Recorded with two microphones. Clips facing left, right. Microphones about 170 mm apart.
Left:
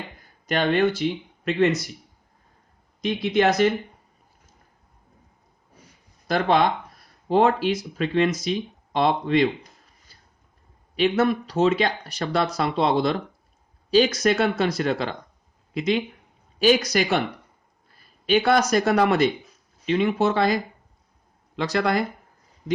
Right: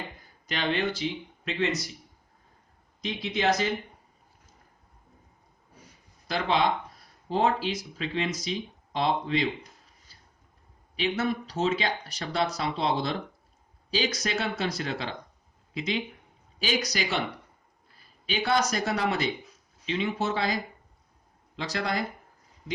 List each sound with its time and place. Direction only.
0.4 s speech: 50° left (ahead or behind)
3.0 s speech: 55° left (ahead or behind)
6.2 s speech: 50° left (ahead or behind)
10.9 s speech: 60° left (ahead or behind)
18.3 s speech: 60° left (ahead or behind)